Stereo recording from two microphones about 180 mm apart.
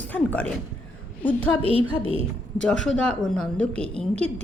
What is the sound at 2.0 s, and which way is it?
Speech, 30° right (ahead or behind).